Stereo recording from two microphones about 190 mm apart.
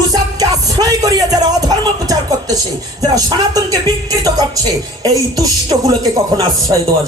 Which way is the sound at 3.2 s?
20° right (ahead or behind).